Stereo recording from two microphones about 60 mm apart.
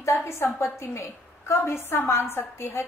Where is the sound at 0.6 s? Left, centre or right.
Left.